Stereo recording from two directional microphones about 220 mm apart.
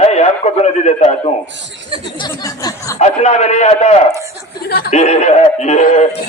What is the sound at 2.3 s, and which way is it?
Speech, 15° left (ahead or behind).